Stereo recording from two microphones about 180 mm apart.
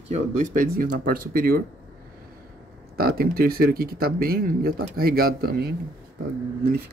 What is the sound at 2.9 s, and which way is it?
Speech, 55° right (ahead or behind).